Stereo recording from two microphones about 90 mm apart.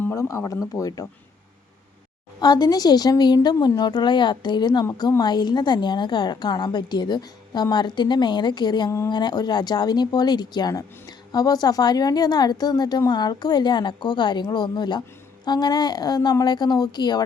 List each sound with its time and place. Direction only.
0.0 s speech: 30° left (ahead or behind)
2.4 s a woman's voice: 50° left (ahead or behind)